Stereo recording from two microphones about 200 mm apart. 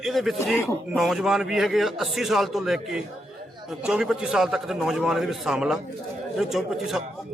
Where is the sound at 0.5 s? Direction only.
10° left (ahead or behind).